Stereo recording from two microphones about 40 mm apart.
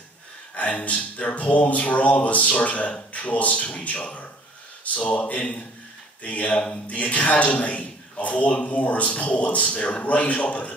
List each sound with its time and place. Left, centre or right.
0.8 s a man's voice: left